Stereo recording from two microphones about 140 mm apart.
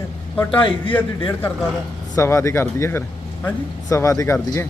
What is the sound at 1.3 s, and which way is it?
Speech, 15° left (ahead or behind).